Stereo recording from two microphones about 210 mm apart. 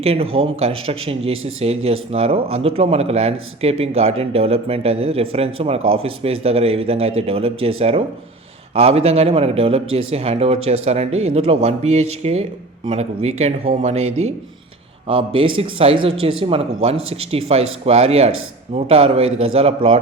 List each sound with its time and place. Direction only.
0.0 s a man's voice: 30° right (ahead or behind)
11.1 s speech: 80° right
11.3 s a man's voice: 30° right (ahead or behind)